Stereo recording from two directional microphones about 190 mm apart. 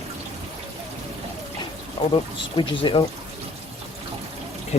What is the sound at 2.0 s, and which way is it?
Speech, 25° left (ahead or behind).